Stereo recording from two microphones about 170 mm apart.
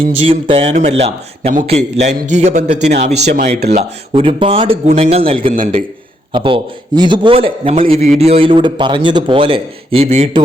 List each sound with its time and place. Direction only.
0.2 s a man's voice: 35° right (ahead or behind)